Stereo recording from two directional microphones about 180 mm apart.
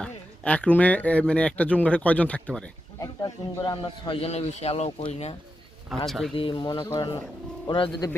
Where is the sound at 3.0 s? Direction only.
20° left (ahead or behind); by 5.3 s 35° left (ahead or behind).